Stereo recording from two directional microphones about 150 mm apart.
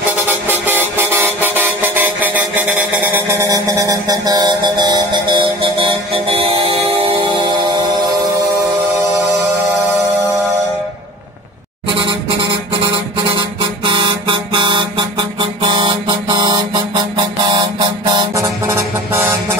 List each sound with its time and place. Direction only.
0.1 s vehicle: 10° right (ahead or behind)
3.4 s music: 25° right (ahead or behind)
12.0 s a sound: 30° right (ahead or behind)
13.8 s vehicle horn: 30° right (ahead or behind)
15.7 s a sound: 30° right (ahead or behind)
17.5 s vehicle: 30° right (ahead or behind)